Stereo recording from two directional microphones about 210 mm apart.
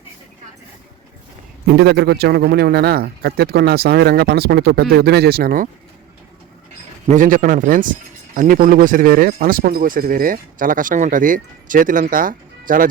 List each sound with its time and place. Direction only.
1.7 s speech: 50° right (ahead or behind)
7.1 s speech: 40° right (ahead or behind)